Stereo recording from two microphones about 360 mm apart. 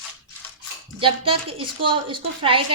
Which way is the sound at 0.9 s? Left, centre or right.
Centre.